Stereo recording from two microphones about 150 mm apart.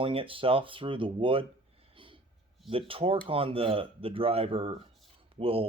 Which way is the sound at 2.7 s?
35° right (ahead or behind).